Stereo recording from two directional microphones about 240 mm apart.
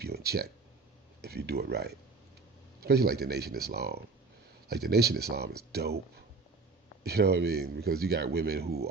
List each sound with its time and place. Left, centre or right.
0.0 s a man's voice: right
7.0 s a man's voice: right